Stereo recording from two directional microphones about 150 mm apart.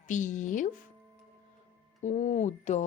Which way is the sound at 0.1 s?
55° left (ahead or behind).